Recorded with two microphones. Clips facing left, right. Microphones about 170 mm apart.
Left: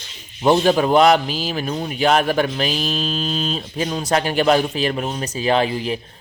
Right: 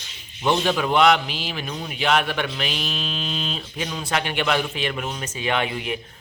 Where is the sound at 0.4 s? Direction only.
40° left (ahead or behind).